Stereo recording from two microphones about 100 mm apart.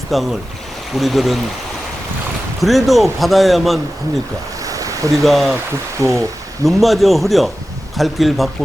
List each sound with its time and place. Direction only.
0.1 s a man's voice: centre (ahead or behind)
2.6 s a man's voice: centre (ahead or behind)
4.6 s a sound: 35° right (ahead or behind)
5.1 s a man's voice: centre (ahead or behind)
6.0 s speech: 35° left (ahead or behind)
6.7 s a man's voice: centre (ahead or behind)